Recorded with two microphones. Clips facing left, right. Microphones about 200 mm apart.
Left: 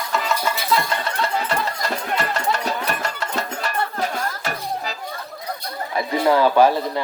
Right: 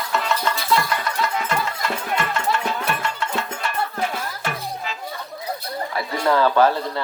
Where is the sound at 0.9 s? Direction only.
30° left (ahead or behind).